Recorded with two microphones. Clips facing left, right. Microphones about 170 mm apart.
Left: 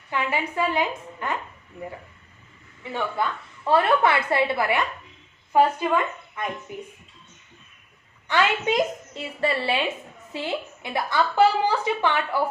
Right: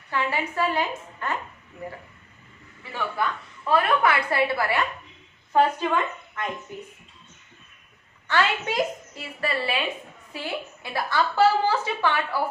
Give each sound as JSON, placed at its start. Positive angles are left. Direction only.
{"t": 0.1, "sound": "a woman's voice", "side_deg": 15}
{"t": 2.9, "sound": "a woman's voice", "side_deg": 25}
{"t": 6.4, "sound": "a sound", "side_deg": 10}
{"t": 8.3, "sound": "a woman's voice", "side_deg": 20}